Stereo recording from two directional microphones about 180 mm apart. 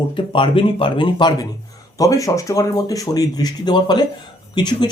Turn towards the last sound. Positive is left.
turn(degrees=25)  # may be behind; listen again after turning